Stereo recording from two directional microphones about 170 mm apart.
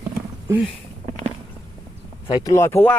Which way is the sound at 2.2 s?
20° left (ahead or behind).